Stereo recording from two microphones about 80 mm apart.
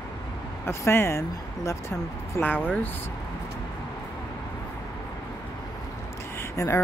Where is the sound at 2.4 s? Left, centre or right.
Left.